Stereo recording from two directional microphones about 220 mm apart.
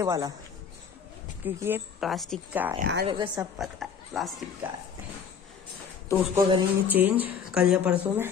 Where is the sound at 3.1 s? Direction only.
20° right (ahead or behind).